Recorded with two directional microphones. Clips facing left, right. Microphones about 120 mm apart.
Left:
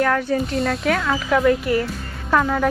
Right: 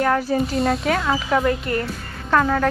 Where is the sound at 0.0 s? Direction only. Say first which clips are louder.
Even; 5° right (ahead or behind).